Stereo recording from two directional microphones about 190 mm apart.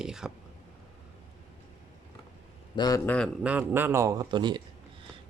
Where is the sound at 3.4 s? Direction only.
10° right (ahead or behind).